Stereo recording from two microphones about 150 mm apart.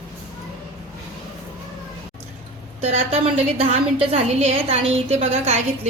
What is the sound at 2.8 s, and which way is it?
A woman's voice, 40° right (ahead or behind).